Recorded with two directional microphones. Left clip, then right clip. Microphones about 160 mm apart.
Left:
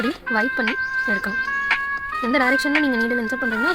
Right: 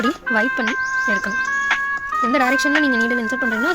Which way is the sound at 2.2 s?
Centre (ahead or behind).